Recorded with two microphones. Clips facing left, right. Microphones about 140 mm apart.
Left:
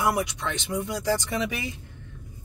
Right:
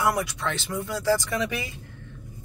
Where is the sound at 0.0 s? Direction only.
20° left (ahead or behind).